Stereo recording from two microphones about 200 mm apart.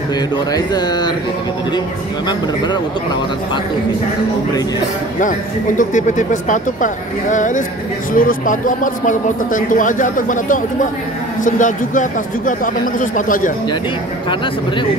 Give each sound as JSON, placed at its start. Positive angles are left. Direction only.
{"t": 0.5, "sound": "speech", "side_deg": 20}
{"t": 5.8, "sound": "speech", "side_deg": 40}